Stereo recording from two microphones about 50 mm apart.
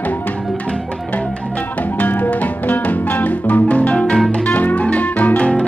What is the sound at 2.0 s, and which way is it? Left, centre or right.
Music, left.